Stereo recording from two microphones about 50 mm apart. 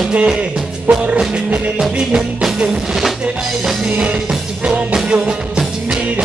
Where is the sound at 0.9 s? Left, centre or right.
Right.